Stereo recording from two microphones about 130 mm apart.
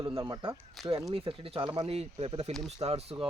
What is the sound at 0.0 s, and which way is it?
Speech, 40° right (ahead or behind).